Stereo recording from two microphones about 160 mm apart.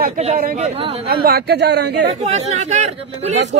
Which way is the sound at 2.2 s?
45° right (ahead or behind).